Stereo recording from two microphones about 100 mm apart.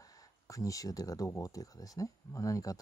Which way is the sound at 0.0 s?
35° left (ahead or behind).